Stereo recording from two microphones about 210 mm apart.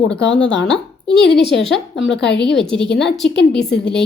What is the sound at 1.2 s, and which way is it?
A woman's voice, 55° left (ahead or behind).